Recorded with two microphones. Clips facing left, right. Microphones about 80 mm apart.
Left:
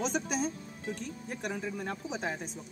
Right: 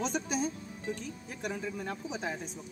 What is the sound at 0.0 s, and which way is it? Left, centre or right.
Speech, centre.